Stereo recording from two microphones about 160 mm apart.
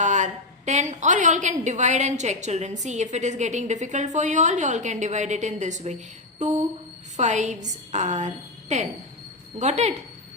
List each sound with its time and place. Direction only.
0.0 s a woman's voice: 50° right (ahead or behind)